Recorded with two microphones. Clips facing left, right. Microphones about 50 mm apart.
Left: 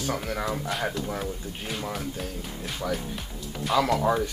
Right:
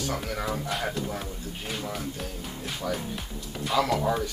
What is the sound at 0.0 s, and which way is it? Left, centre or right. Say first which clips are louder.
Speech: left 2 dB; centre.